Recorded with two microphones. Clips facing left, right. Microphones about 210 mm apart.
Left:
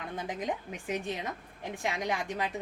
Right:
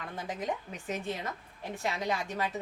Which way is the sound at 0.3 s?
15° left (ahead or behind).